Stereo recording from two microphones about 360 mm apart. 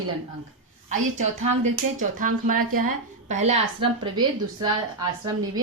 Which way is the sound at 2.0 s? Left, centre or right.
Right.